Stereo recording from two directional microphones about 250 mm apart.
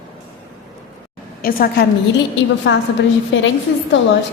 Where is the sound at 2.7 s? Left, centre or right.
Left.